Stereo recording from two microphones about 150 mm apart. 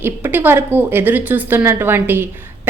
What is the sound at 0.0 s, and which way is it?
A woman's voice, 15° right (ahead or behind).